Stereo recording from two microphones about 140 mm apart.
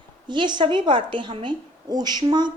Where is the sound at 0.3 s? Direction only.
35° right (ahead or behind).